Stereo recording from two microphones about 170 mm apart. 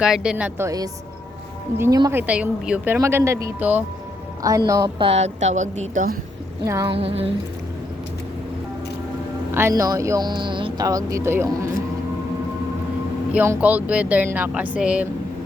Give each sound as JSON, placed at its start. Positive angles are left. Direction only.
{"t": 0.0, "sound": "a woman's voice", "side_deg": -5}
{"t": 1.8, "sound": "a woman's voice", "side_deg": -20}
{"t": 6.8, "sound": "a woman's voice", "side_deg": -35}
{"t": 9.6, "sound": "speech", "side_deg": -15}
{"t": 13.3, "sound": "speech", "side_deg": -10}